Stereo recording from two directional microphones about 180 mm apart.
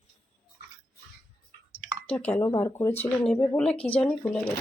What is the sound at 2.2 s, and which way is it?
Speech, 10° left (ahead or behind).